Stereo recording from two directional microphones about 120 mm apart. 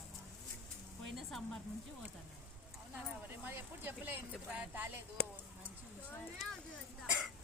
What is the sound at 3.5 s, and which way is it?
Speech, 15° right (ahead or behind).